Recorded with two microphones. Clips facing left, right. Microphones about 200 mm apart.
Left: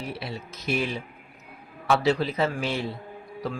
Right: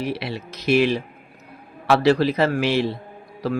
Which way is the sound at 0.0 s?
85° right.